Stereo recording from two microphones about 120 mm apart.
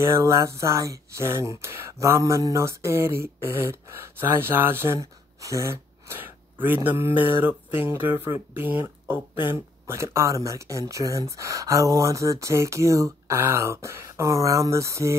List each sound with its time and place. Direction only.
0.1 s speech: 25° right (ahead or behind)